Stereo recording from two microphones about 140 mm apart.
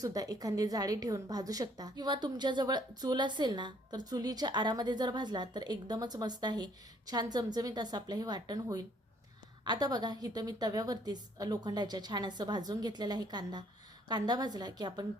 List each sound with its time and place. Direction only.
0.0 s a woman's voice: 25° right (ahead or behind)